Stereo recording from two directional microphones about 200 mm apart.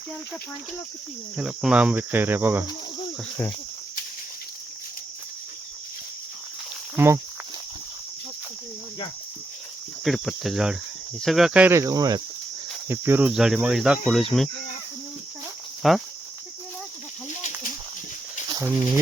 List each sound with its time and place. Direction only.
1.4 s cricket: 5° right (ahead or behind)
6.9 s cricket: 10° right (ahead or behind)
10.0 s cricket: centre (ahead or behind)
15.8 s cricket: centre (ahead or behind)
17.2 s a sound: 35° left (ahead or behind)
18.4 s a sound: 20° right (ahead or behind)